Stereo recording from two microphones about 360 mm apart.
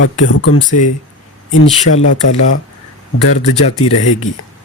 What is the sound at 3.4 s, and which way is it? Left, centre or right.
Speech, centre.